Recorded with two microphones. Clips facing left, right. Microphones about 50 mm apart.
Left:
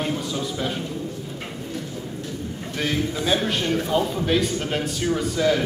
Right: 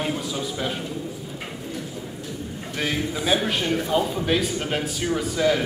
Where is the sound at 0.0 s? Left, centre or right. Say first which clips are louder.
Left 1 dB; centre.